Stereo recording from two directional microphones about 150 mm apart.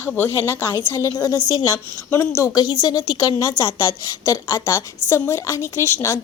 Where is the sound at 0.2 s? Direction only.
15° left (ahead or behind).